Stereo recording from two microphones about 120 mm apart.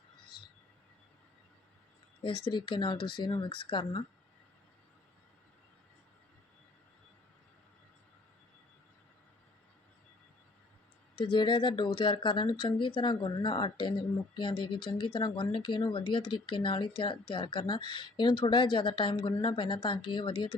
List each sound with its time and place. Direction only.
2.2 s speech: 40° left (ahead or behind)
11.3 s speech: 45° left (ahead or behind)